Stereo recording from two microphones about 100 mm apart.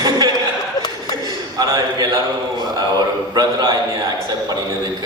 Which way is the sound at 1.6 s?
35° right (ahead or behind).